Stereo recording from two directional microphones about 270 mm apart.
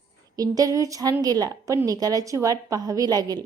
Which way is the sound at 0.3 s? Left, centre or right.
Centre.